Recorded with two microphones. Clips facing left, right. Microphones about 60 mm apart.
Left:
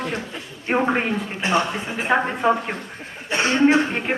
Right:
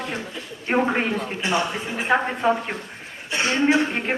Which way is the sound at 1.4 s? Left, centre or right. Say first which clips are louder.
Left 4 dB; left.